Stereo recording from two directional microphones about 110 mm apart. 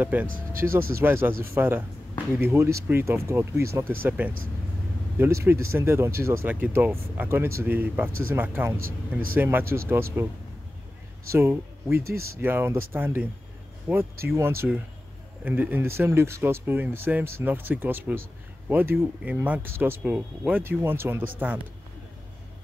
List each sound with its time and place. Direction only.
0.0 s speech: 15° right (ahead or behind)
11.3 s speech: 20° right (ahead or behind)